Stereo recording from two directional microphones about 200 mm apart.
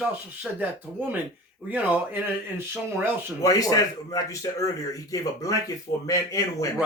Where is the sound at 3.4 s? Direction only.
15° left (ahead or behind).